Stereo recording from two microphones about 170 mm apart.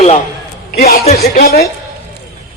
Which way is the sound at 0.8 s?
65° left (ahead or behind).